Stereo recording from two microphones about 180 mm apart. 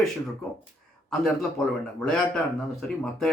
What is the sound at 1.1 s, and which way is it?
Speech, centre (ahead or behind).